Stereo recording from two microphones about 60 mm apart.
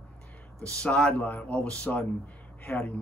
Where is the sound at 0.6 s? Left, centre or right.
Centre.